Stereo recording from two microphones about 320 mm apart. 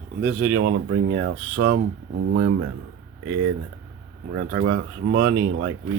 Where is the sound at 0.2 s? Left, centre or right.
Right.